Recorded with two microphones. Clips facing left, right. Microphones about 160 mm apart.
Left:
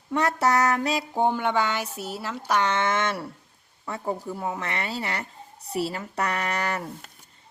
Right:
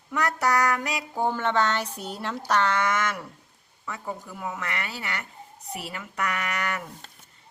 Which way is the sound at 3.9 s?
30° left (ahead or behind).